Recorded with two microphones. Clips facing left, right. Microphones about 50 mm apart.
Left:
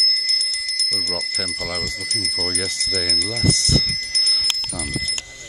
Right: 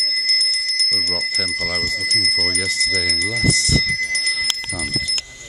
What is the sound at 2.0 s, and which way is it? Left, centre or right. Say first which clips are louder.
Speech: right 6 dB; right.